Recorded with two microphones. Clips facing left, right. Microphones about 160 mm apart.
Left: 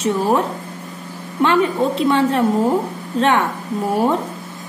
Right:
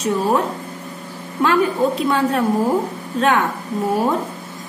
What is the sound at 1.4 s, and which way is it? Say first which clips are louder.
A woman's voice: left 1 dB; 25° left (ahead or behind).